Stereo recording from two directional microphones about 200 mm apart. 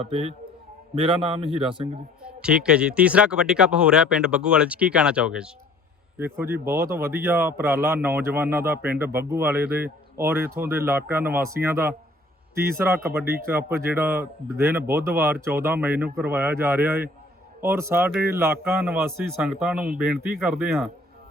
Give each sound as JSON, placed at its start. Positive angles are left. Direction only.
{"t": 0.0, "sound": "a man's voice", "side_deg": -30}
{"t": 2.2, "sound": "a man's voice", "side_deg": -5}
{"t": 13.7, "sound": "a man's voice", "side_deg": -10}